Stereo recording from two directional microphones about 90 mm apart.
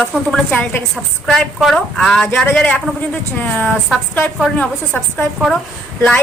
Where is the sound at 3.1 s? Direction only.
15° left (ahead or behind).